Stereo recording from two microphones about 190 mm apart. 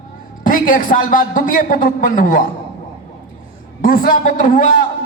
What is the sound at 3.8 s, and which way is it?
Speech, 45° left (ahead or behind).